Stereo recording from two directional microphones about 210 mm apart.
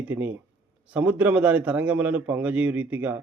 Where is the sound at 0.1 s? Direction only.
10° right (ahead or behind).